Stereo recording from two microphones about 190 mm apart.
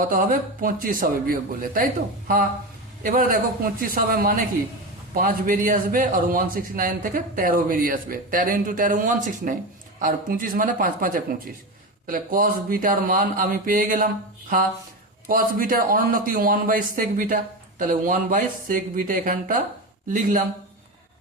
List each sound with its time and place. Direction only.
0.0 s a man's voice: 45° right (ahead or behind)
15.3 s a man's voice: 45° right (ahead or behind)